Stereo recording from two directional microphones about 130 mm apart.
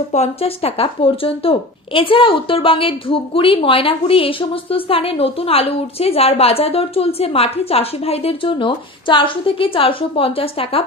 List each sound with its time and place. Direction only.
0.1 s speech: 55° left (ahead or behind)